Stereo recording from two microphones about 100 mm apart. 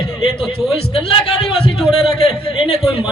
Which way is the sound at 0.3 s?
5° left (ahead or behind).